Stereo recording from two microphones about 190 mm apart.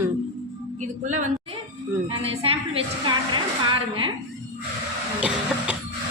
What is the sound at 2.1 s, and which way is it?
A woman's voice, 30° right (ahead or behind).